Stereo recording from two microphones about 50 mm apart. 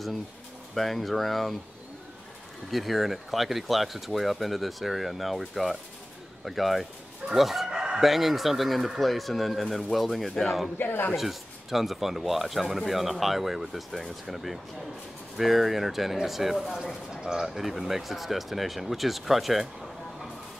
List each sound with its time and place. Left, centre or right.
0.7 s speech: centre
2.7 s speech: centre
7.3 s crowing: centre
8.0 s speech: centre
10.8 s speech: left
11.1 s speech: centre